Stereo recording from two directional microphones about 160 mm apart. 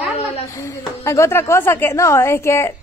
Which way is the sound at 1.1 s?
15° left (ahead or behind).